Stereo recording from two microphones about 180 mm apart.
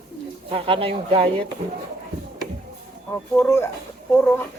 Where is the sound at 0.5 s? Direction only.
30° right (ahead or behind).